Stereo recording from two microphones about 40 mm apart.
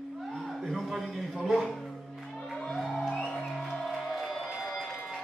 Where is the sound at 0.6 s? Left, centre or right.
Centre.